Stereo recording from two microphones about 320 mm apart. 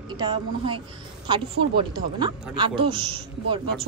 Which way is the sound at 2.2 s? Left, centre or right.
Centre.